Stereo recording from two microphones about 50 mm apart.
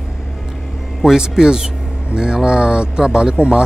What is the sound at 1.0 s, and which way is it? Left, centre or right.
Speech, centre.